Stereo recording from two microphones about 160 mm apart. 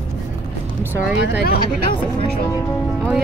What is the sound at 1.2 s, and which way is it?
Speech, 70° left (ahead or behind).